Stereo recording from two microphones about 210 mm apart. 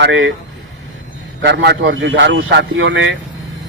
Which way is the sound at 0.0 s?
60° right (ahead or behind).